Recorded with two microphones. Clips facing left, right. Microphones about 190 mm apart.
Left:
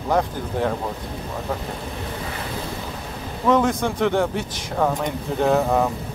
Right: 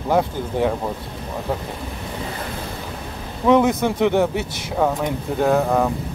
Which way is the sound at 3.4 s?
10° right (ahead or behind).